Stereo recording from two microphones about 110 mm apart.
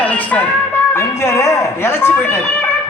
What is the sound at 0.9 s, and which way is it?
Speech, 25° left (ahead or behind).